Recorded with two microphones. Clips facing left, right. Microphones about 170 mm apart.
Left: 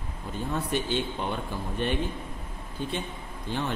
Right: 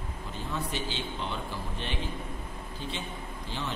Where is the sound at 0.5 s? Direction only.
55° left (ahead or behind).